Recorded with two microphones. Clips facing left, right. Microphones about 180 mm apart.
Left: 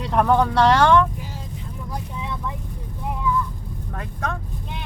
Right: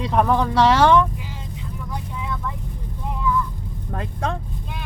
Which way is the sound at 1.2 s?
40° left (ahead or behind).